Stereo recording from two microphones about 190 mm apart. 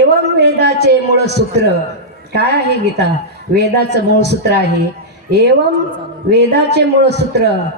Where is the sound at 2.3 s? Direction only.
60° right (ahead or behind).